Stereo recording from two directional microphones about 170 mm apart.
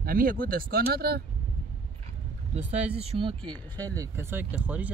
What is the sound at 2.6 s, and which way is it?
Speech, 35° right (ahead or behind).